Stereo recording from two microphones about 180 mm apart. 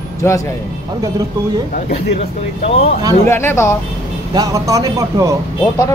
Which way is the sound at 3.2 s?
15° left (ahead or behind).